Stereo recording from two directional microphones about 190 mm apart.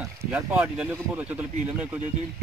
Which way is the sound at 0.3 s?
5° right (ahead or behind).